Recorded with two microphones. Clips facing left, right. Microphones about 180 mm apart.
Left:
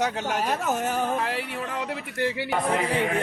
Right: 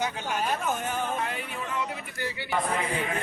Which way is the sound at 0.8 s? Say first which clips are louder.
Left 4 dB; 80° left.